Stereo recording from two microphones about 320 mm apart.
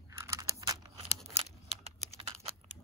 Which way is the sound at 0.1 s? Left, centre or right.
Centre.